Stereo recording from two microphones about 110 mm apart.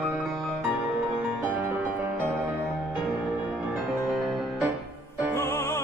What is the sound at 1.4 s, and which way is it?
Music, 15° right (ahead or behind).